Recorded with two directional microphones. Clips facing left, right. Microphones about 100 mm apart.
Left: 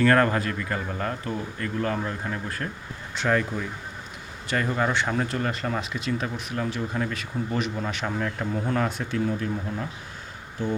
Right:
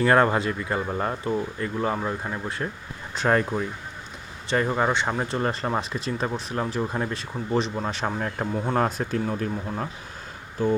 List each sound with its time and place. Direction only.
0.0 s speech: 20° right (ahead or behind)
3.2 s speech: 40° right (ahead or behind)
4.4 s speech: 25° right (ahead or behind)
5.4 s speech: 35° right (ahead or behind)